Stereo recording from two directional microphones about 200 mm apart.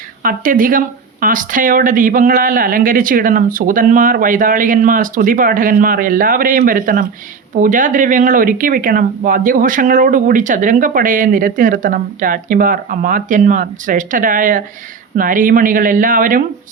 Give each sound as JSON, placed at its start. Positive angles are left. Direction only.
{"t": 0.2, "sound": "speech", "side_deg": -45}